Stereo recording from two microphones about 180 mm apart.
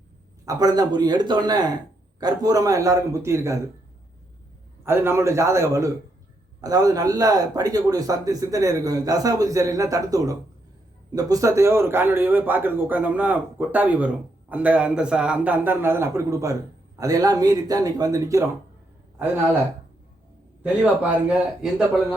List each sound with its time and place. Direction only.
0.4 s a man's voice: 20° right (ahead or behind)
4.9 s a man's voice: 15° right (ahead or behind)
20.8 s speech: 5° right (ahead or behind)